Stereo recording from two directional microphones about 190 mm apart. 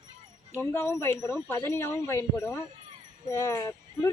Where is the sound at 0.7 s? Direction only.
15° left (ahead or behind).